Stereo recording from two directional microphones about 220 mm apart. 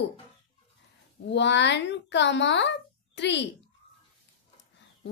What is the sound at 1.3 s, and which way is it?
Speech, 55° left (ahead or behind).